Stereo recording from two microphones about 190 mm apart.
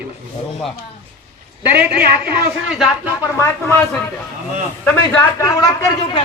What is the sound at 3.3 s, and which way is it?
Speech, 15° left (ahead or behind).